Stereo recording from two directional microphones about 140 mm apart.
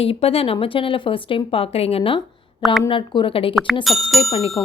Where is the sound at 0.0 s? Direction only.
45° left (ahead or behind).